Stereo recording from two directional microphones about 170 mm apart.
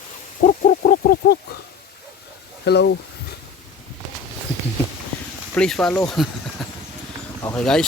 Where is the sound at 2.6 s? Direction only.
75° left (ahead or behind).